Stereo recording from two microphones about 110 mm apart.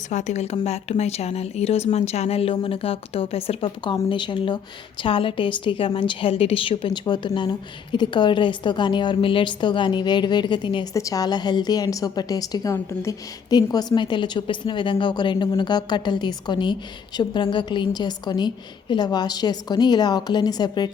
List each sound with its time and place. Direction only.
0.1 s a woman's voice: 90° left
0.6 s a woman's voice: 75° left (ahead or behind); by 10.8 s 45° left (ahead or behind)
10.9 s a woman's voice: 30° left (ahead or behind)
12.7 s a woman's voice: 25° left (ahead or behind)
13.5 s a woman's voice: 35° left (ahead or behind)